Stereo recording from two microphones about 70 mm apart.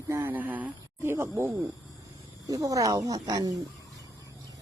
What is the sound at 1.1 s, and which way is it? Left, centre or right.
Speech, right.